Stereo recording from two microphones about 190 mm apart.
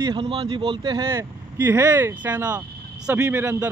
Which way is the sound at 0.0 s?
25° right (ahead or behind).